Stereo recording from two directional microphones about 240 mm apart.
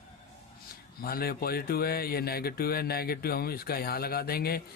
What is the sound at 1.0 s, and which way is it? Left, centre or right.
Speech, left.